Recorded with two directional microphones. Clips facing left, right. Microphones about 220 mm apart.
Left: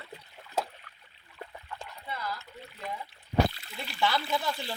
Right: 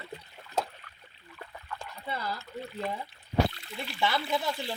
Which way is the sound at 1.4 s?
20° left (ahead or behind).